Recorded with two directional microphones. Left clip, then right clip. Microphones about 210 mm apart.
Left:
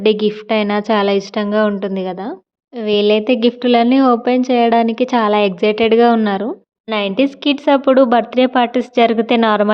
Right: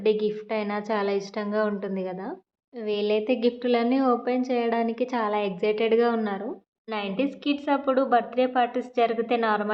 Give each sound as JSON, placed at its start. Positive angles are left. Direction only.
{"t": 0.0, "sound": "a woman's voice", "side_deg": 45}